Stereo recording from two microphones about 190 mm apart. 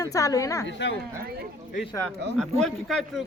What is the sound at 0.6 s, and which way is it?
Speech, 70° left (ahead or behind).